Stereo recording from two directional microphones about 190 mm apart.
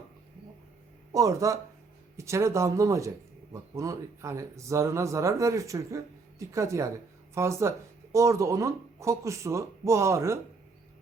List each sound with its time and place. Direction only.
1.1 s speech: 15° right (ahead or behind)